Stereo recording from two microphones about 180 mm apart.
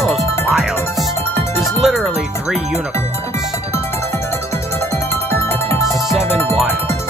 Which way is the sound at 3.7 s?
15° left (ahead or behind).